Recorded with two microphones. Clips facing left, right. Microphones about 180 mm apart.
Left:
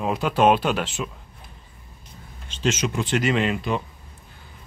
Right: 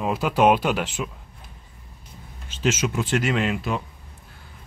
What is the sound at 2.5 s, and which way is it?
Speech, 5° right (ahead or behind).